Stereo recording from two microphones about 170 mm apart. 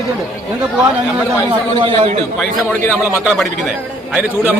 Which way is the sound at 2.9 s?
10° right (ahead or behind).